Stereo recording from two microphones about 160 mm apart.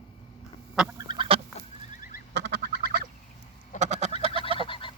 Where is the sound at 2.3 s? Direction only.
90° right.